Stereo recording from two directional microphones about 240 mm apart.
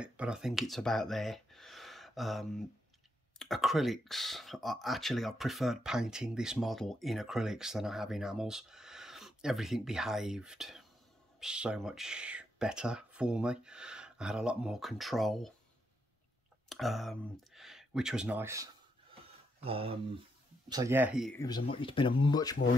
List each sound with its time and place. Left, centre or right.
0.0 s speech: centre
16.6 s speech: centre
19.6 s speech: right
20.7 s speech: centre
21.4 s speech: centre